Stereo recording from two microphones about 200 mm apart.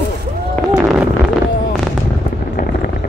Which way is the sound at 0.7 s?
5° right (ahead or behind).